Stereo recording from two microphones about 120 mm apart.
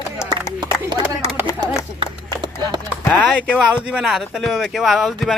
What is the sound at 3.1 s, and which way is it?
Speech, 10° left (ahead or behind).